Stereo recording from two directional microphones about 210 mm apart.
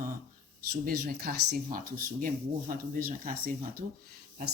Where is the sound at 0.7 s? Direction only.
45° right (ahead or behind).